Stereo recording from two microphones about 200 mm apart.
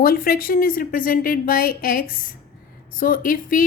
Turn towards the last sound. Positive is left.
turn(degrees=45)  # may be behind; listen again after turning